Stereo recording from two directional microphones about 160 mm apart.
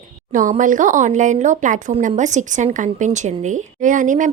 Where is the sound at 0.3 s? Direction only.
55° right (ahead or behind).